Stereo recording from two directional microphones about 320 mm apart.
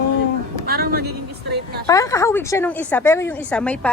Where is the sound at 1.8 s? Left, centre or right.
Centre.